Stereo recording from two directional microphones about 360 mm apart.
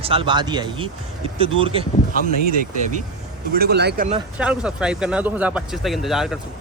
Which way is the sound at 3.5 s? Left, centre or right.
Right.